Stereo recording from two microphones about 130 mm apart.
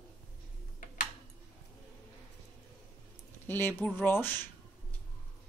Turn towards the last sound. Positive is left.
turn(degrees=15)  # may be behind; listen again after turning